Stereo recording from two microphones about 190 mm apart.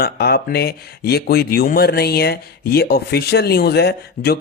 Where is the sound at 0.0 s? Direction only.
55° left (ahead or behind).